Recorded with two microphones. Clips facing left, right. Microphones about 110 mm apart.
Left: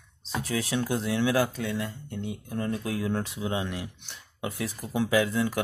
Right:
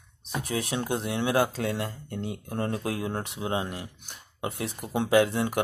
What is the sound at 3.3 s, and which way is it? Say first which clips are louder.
Speech: right 1 dB; 50° right (ahead or behind).